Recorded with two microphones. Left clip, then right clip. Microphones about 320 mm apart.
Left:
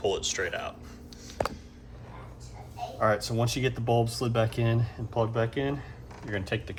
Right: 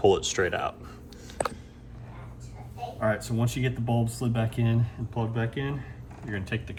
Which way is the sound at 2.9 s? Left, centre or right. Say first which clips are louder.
Left 2 dB; left.